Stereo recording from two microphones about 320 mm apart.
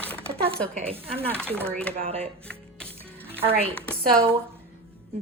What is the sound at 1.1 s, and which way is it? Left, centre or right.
Speech, centre.